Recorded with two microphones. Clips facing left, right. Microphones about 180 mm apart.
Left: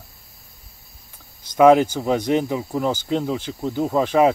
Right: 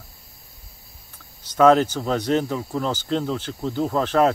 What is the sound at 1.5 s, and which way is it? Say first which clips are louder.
Speech: left 2 dB; 10° left (ahead or behind).